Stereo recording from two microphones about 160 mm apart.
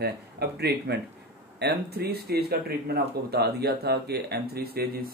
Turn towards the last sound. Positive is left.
turn(degrees=-75)  # may be behind; listen again after turning